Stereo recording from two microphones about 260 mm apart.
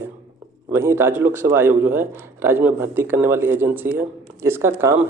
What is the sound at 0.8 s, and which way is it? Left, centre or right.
Speech, centre.